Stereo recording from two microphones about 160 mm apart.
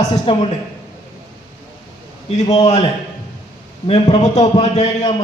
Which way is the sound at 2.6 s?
45° left (ahead or behind).